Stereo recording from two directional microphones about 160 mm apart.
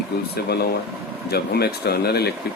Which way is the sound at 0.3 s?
85° left.